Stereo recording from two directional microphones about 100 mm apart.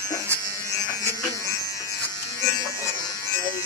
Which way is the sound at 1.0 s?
30° left (ahead or behind).